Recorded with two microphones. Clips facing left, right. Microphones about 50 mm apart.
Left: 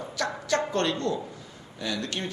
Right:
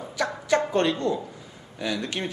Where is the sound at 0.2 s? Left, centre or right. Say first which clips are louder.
Right 3 dB; centre.